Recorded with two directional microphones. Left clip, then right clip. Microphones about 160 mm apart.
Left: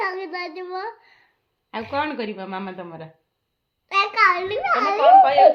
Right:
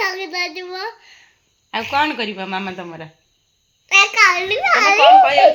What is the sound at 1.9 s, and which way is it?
A woman's voice, 35° right (ahead or behind).